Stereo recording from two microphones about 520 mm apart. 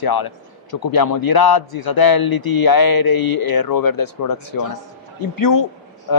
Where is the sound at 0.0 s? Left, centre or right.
Left.